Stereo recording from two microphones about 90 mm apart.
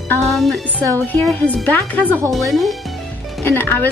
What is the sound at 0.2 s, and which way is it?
Speech, centre (ahead or behind).